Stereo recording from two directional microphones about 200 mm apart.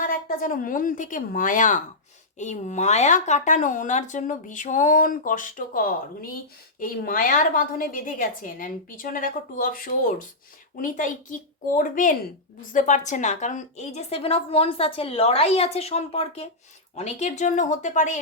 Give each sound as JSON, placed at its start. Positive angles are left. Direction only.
{"t": 0.0, "sound": "a woman's voice", "side_deg": 45}